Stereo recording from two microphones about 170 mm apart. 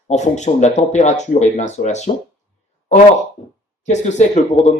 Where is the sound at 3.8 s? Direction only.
45° left (ahead or behind).